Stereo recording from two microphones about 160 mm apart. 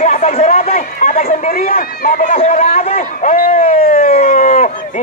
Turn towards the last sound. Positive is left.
turn(degrees=55)  # may be behind; listen again after turning